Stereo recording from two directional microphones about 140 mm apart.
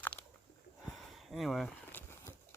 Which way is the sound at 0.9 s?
Centre (ahead or behind).